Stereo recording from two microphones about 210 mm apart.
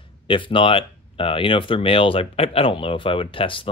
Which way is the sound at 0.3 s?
25° left (ahead or behind).